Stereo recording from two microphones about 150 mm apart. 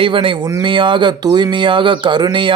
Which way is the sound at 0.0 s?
35° right (ahead or behind).